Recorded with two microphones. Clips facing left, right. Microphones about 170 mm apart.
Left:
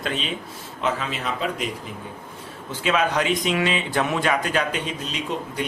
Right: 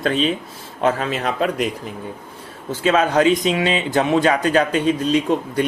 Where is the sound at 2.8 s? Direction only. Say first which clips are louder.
Right 6 dB; 35° right (ahead or behind).